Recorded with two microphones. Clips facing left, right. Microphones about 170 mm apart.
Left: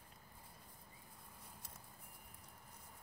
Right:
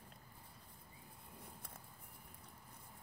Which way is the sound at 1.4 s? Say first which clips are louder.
Right 4 dB; 55° right (ahead or behind).